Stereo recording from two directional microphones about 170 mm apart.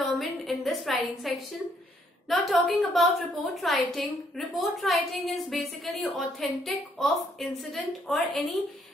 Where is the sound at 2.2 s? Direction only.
Centre (ahead or behind).